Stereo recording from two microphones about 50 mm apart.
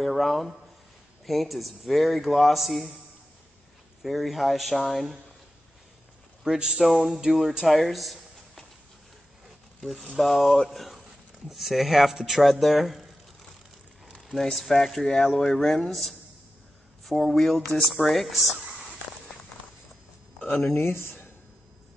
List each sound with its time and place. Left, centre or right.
0.0 s speech: centre
4.0 s speech: centre
6.4 s speech: centre
9.8 s speech: centre
14.3 s speech: centre
20.3 s a sound: centre